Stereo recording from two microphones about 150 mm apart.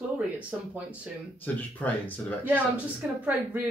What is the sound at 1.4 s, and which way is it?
Speech, 10° left (ahead or behind).